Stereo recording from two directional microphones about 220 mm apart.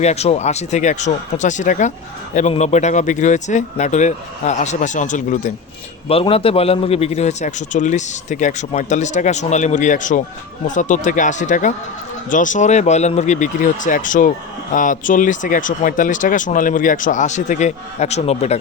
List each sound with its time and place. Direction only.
0.0 s a man's voice: 30° left (ahead or behind)